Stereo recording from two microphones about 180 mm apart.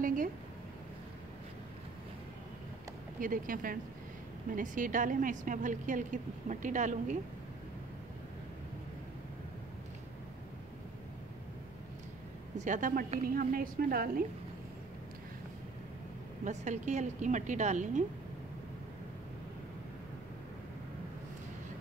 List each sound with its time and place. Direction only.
0.0 s a sound: 50° right (ahead or behind)
3.2 s a woman's voice: 50° right (ahead or behind)
12.5 s a woman's voice: 45° right (ahead or behind)
16.4 s a woman's voice: 40° right (ahead or behind)